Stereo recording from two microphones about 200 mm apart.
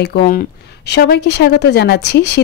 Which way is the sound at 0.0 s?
50° left (ahead or behind).